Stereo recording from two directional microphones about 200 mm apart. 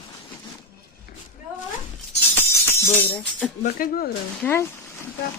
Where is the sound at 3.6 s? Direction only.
45° left (ahead or behind).